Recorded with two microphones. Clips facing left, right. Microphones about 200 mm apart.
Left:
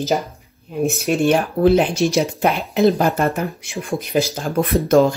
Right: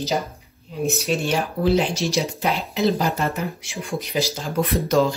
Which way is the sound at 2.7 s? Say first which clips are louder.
Left 6 dB; 55° left (ahead or behind).